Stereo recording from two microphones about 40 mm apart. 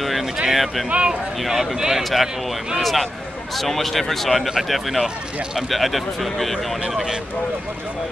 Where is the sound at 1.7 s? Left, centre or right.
Centre.